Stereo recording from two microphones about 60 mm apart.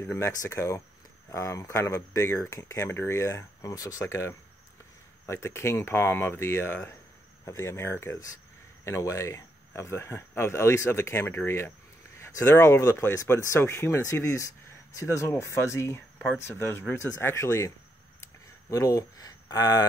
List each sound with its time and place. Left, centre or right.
0.2 s speech: left
2.5 s speech: left
2.9 s speech: left
7.4 s speech: left
8.8 s speech: left
12.7 s speech: left
18.2 s a sound: left